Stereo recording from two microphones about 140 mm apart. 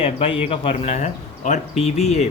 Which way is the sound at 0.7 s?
55° left (ahead or behind).